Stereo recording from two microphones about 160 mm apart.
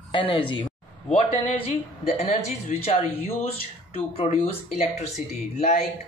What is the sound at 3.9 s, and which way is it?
Speech, 45° left (ahead or behind).